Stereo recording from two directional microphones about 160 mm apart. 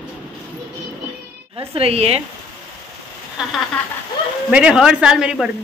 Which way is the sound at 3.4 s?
5° right (ahead or behind).